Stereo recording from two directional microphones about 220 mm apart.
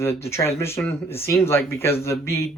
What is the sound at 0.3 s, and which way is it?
Speech, 10° left (ahead or behind).